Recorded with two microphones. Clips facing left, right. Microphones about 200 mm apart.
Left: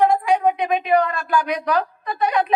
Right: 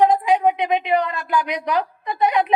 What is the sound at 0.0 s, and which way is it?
A woman's voice, 20° right (ahead or behind).